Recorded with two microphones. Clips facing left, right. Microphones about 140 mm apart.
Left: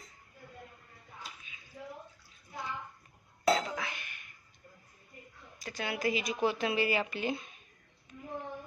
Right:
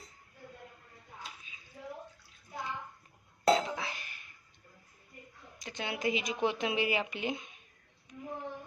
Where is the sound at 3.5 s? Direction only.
25° right (ahead or behind).